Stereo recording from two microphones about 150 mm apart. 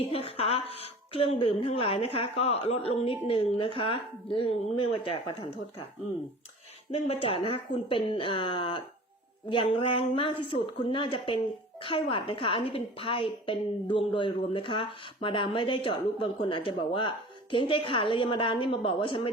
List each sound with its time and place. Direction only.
0.1 s a woman's voice: 40° left (ahead or behind)
6.9 s a woman's voice: 40° left (ahead or behind)